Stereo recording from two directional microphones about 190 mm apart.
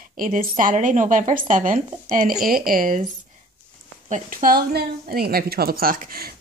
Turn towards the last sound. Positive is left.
turn(degrees=-50)  # may be behind; listen again after turning